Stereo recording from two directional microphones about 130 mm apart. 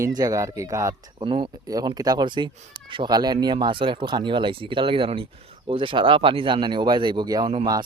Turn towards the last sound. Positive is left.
turn(degrees=-35)  # may be behind; listen again after turning